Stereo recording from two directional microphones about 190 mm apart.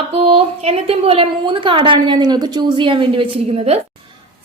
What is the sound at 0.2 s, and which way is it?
A woman's voice, 30° right (ahead or behind).